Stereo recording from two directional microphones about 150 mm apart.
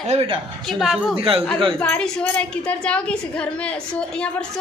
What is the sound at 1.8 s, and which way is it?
A woman's voice, 10° left (ahead or behind).